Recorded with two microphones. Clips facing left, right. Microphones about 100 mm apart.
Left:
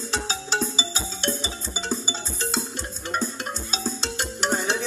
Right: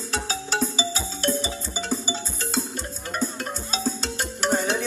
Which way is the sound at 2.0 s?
45° right (ahead or behind).